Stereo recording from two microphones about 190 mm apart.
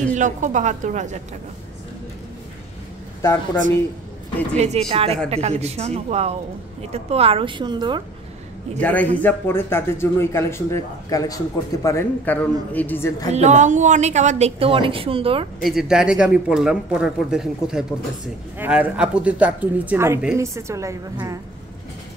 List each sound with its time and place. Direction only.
0.1 s a woman's voice: 40° right (ahead or behind)
4.6 s a woman's voice: 35° right (ahead or behind)
8.7 s speech: 10° left (ahead or behind)
13.3 s a woman's voice: 35° right (ahead or behind)
15.6 s a man's voice: 5° right (ahead or behind)